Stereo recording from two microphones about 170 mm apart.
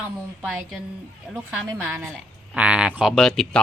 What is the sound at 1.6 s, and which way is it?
Speech, 15° right (ahead or behind).